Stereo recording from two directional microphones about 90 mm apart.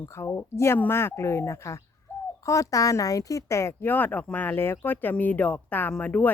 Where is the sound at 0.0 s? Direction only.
30° left (ahead or behind).